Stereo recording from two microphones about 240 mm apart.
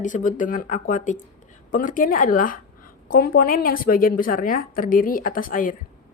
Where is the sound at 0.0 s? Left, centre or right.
Left.